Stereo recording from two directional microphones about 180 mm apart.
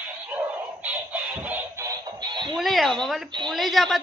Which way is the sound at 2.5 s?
Centre (ahead or behind).